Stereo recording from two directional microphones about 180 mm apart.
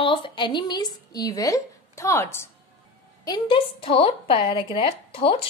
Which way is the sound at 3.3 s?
30° left (ahead or behind).